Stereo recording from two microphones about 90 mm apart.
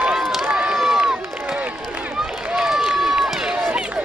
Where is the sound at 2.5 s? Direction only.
5° right (ahead or behind).